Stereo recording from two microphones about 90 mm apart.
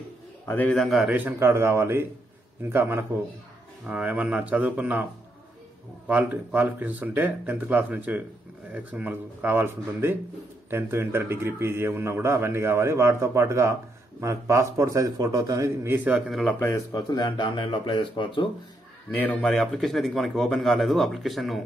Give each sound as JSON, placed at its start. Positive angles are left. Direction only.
{"t": 0.5, "sound": "a man's voice", "side_deg": 20}
{"t": 0.7, "sound": "speech", "side_deg": 0}
{"t": 1.4, "sound": "a man's voice", "side_deg": -30}
{"t": 3.8, "sound": "speech", "side_deg": -15}
{"t": 6.0, "sound": "a man's voice", "side_deg": -15}
{"t": 15.8, "sound": "a man's voice", "side_deg": -20}
{"t": 16.2, "sound": "speech", "side_deg": 0}
{"t": 16.5, "sound": "a man's voice", "side_deg": 35}
{"t": 16.9, "sound": "speech", "side_deg": 55}
{"t": 19.1, "sound": "a man's voice", "side_deg": 20}
{"t": 19.4, "sound": "speech", "side_deg": 5}